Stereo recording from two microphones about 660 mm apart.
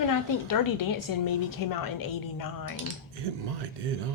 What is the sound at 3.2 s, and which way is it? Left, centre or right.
Speech, right.